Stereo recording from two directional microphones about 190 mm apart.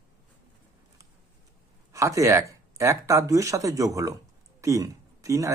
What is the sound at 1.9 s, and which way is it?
Speech, 15° right (ahead or behind).